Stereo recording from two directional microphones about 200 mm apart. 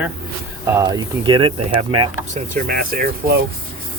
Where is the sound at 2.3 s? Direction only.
45° right (ahead or behind).